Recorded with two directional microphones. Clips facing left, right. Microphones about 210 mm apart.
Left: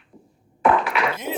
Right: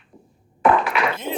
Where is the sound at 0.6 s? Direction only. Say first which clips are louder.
Right 1 dB; 50° right (ahead or behind).